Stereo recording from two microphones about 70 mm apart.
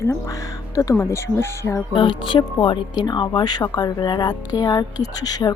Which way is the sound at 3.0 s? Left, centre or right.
Left.